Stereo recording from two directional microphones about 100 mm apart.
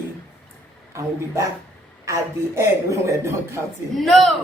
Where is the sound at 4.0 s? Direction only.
Centre (ahead or behind).